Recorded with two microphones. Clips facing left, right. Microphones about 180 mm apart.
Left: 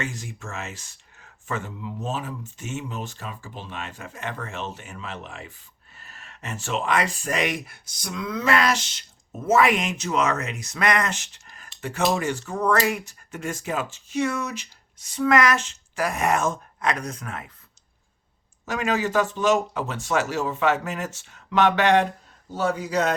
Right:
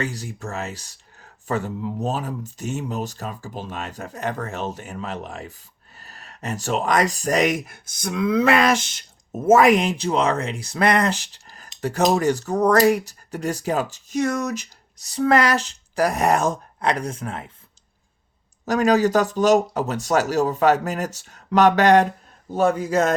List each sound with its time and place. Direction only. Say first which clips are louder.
0.0 s speech: right 4 dB; 35° right (ahead or behind)
18.6 s a man's voice: right 7 dB; 40° right (ahead or behind)